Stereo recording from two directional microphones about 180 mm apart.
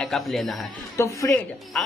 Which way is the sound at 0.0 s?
Centre (ahead or behind).